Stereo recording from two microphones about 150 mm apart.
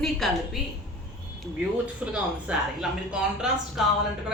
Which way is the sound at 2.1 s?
5° right (ahead or behind).